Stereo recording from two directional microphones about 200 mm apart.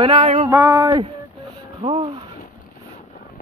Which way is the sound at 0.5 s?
15° right (ahead or behind).